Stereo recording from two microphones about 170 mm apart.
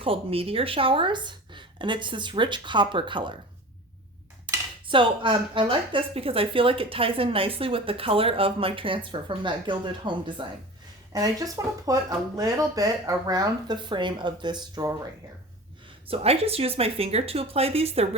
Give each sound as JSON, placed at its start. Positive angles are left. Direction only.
{"t": 0.0, "sound": "speech", "side_deg": -35}
{"t": 4.4, "sound": "speech", "side_deg": -30}
{"t": 16.0, "sound": "speech", "side_deg": -35}